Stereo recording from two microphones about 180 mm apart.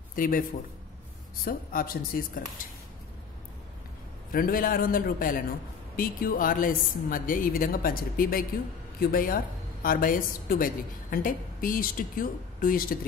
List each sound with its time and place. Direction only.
0.1 s a man's voice: 50° left (ahead or behind)
4.3 s a woman's voice: 55° left (ahead or behind)